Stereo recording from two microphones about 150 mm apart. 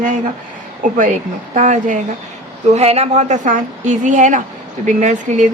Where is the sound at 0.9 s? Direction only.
60° right (ahead or behind).